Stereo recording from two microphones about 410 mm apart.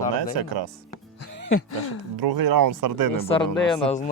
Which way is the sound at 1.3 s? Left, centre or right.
Left.